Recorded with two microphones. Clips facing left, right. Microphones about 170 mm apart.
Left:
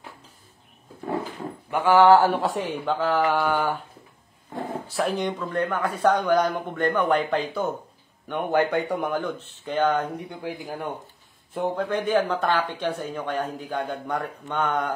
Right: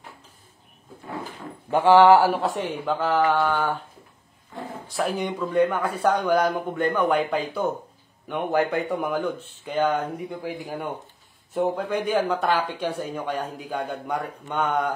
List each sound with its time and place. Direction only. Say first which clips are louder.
1.7 s speech: right 3 dB; 25° right (ahead or behind)
2.0 s speech: even; 10° right (ahead or behind)
3.3 s a sound: even; 10° left (ahead or behind)
4.8 s speech: even; centre (ahead or behind)